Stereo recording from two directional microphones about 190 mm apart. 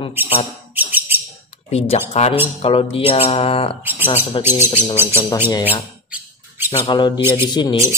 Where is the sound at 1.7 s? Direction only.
35° left (ahead or behind).